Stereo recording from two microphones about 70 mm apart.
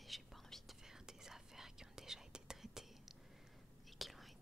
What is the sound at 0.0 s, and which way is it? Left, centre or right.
Whispering, centre.